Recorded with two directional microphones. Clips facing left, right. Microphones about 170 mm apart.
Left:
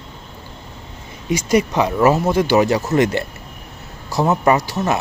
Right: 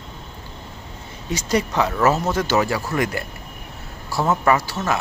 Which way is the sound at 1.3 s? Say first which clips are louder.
Left 5 dB; 10° left (ahead or behind).